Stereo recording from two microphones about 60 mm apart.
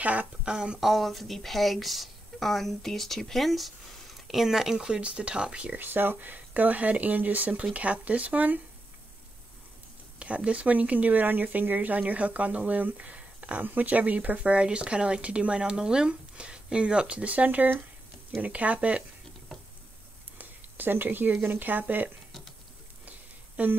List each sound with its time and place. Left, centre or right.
0.0 s speech: right
0.5 s speech: centre
0.7 s speech: centre
5.8 s speech: right
10.1 s speech: right
20.3 s a sound: right
21.5 s speech: right
23.0 s a sound: right